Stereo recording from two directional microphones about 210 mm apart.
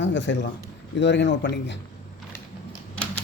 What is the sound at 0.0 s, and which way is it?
A man's voice, 60° left (ahead or behind).